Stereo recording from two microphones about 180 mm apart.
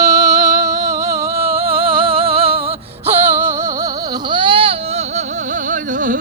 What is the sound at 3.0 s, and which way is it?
Music, 15° right (ahead or behind).